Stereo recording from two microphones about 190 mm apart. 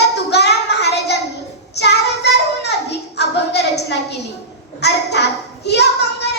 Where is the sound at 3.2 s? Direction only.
60° left (ahead or behind).